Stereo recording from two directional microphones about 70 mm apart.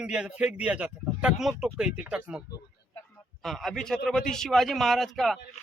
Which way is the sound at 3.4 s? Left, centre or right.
Centre.